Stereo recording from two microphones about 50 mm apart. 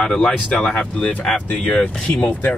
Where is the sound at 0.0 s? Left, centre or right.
Centre.